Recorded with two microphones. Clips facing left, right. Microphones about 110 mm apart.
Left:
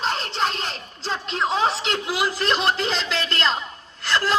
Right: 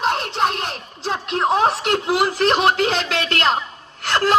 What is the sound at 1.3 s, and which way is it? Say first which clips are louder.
Speech: right 5 dB; 55° right (ahead or behind).